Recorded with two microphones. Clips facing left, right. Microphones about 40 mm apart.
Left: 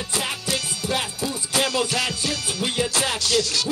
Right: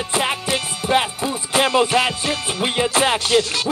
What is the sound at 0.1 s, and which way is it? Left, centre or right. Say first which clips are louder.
Speech: right 6 dB; right.